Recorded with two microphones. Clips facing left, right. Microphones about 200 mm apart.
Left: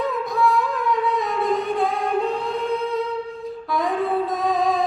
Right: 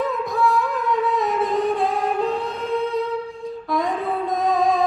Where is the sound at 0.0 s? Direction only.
Centre (ahead or behind).